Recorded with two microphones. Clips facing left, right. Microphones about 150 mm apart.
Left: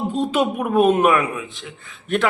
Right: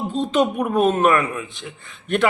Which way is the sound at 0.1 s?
10° left (ahead or behind).